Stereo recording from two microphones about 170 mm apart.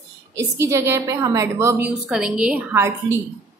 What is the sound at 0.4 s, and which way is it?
A woman's voice, 15° right (ahead or behind).